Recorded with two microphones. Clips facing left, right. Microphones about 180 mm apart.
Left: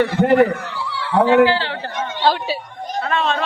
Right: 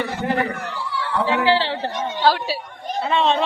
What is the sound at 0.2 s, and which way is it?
A man's voice, 60° left (ahead or behind).